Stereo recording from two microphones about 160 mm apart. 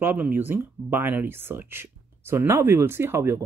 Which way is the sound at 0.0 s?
10° right (ahead or behind).